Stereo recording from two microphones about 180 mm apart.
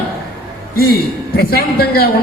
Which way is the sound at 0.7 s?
60° left (ahead or behind).